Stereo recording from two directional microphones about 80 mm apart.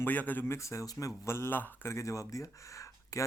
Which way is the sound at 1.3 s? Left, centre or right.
Left.